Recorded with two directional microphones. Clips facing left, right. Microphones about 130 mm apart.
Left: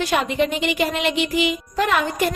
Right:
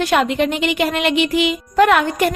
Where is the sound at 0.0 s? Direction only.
65° right (ahead or behind).